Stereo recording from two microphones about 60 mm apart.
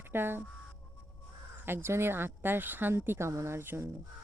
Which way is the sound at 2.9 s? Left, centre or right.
Right.